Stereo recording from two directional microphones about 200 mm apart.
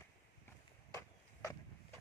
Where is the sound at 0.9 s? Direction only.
15° left (ahead or behind).